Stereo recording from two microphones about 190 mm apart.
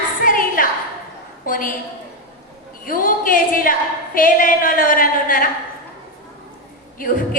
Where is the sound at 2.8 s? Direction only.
45° left (ahead or behind).